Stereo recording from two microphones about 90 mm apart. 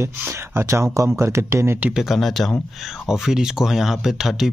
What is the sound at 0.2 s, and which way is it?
Speech, 25° right (ahead or behind).